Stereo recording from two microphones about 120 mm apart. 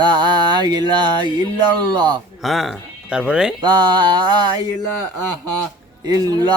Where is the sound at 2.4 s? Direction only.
Centre (ahead or behind).